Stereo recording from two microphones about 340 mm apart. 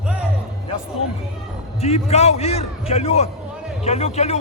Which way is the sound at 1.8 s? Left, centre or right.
Centre.